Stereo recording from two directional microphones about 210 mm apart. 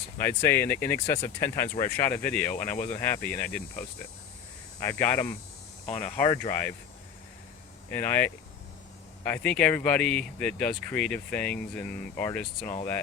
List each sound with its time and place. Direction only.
0.3 s speech: 10° left (ahead or behind)
5.8 s speech: 30° left (ahead or behind)
6.5 s speech: 10° left (ahead or behind)
7.9 s speech: 10° left (ahead or behind)